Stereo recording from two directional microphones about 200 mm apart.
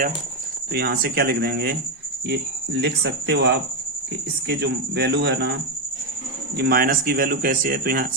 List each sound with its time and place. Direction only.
0.7 s speech: 50° right (ahead or behind)
6.6 s speech: 50° right (ahead or behind)